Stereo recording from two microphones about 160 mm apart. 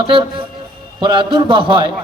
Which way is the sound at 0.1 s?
35° right (ahead or behind).